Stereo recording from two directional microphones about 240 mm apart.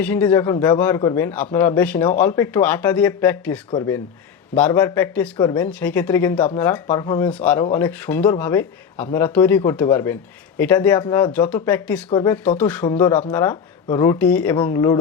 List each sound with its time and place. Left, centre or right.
0.0 s a man's voice: centre